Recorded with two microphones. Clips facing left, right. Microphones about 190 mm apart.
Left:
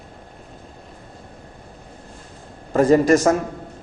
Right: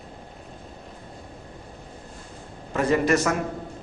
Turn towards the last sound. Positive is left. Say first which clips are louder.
# left 7 dB
turn(degrees=40)  # may be behind; listen again after turning